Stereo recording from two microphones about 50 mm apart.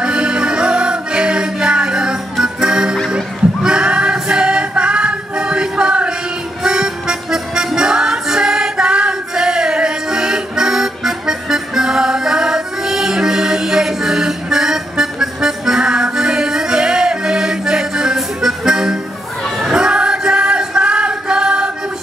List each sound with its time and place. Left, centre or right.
0.0 s music: centre
3.1 s singing: centre
6.6 s music: centre